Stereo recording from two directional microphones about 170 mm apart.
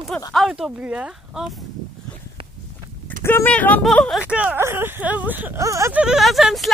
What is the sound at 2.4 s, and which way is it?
Walk, 30° right (ahead or behind).